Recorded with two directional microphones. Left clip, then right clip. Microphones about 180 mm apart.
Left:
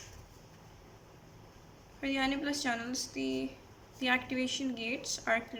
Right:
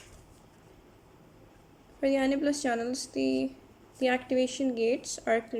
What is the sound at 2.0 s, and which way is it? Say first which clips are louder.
Speech: right 6 dB; 35° right (ahead or behind).